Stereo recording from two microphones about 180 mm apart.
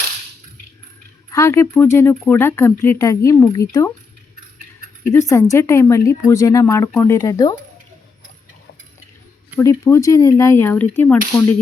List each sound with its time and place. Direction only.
1.3 s speech: 15° left (ahead or behind)
5.1 s speech: 15° left (ahead or behind)
9.6 s speech: 15° left (ahead or behind)